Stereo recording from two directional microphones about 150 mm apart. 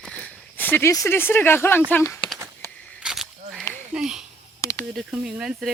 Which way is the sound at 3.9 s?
5° right (ahead or behind).